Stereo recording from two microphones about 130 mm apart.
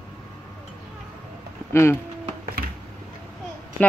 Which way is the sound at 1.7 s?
20° left (ahead or behind).